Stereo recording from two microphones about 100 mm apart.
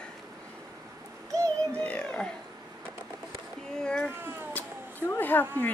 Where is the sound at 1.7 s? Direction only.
15° left (ahead or behind).